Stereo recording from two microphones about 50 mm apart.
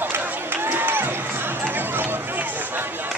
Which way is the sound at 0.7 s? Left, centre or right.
Right.